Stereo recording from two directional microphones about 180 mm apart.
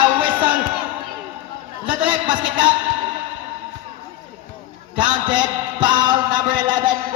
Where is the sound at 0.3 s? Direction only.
10° right (ahead or behind).